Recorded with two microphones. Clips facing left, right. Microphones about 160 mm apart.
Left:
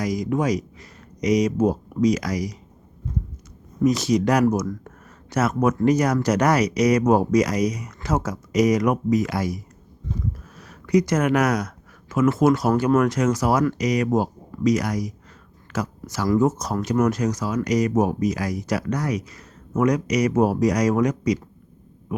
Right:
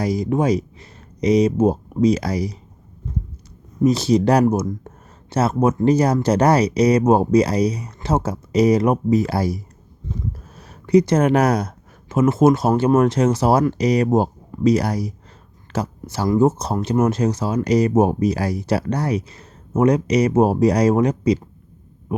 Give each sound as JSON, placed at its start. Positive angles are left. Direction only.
{"t": 0.0, "sound": "speech", "side_deg": -30}
{"t": 3.8, "sound": "speech", "side_deg": -30}
{"t": 10.6, "sound": "speech", "side_deg": -30}